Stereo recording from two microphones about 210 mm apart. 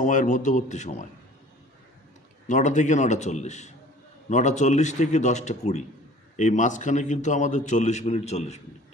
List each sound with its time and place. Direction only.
0.0 s a man's voice: 35° left (ahead or behind)
2.4 s a man's voice: 35° left (ahead or behind)